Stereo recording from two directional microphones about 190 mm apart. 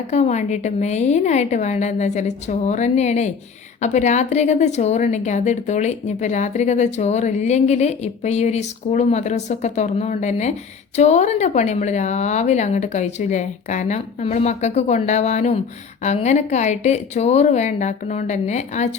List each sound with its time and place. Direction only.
0.1 s speech: 35° left (ahead or behind)